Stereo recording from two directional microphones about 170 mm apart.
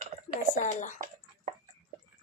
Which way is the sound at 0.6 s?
45° left (ahead or behind).